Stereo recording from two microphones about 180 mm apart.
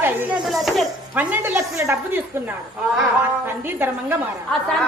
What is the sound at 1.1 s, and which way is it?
A woman's voice, 10° right (ahead or behind).